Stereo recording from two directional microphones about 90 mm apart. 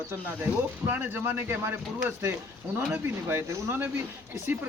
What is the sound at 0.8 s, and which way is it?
Speech, 20° right (ahead or behind).